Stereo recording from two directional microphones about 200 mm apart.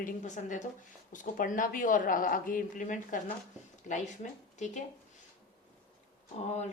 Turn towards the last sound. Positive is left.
turn(degrees=35)  # may be behind; listen again after turning